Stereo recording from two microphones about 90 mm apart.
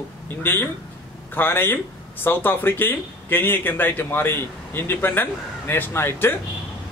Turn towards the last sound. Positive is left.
turn(degrees=25)  # may be behind; listen again after turning